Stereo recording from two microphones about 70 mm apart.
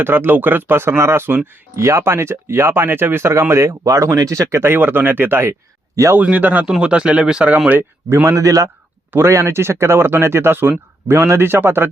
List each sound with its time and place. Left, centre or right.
0.0 s speech: right
6.1 s speech: right
6.7 s speech: centre
8.1 s a man's voice: right
9.1 s speech: right